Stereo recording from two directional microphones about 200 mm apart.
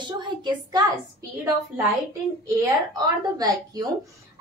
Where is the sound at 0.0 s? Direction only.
25° right (ahead or behind).